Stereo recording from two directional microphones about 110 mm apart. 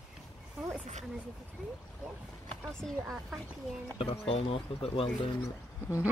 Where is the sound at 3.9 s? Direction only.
60° left (ahead or behind).